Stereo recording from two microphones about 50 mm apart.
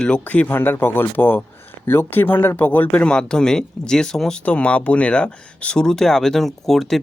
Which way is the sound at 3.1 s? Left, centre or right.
Centre.